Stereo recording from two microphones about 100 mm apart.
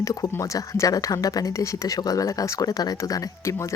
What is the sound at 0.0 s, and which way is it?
A woman's voice, 35° left (ahead or behind).